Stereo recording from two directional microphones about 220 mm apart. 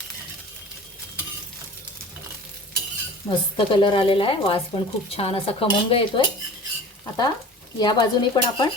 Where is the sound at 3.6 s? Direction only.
25° left (ahead or behind).